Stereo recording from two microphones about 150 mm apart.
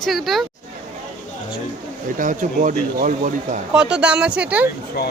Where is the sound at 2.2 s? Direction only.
60° right (ahead or behind).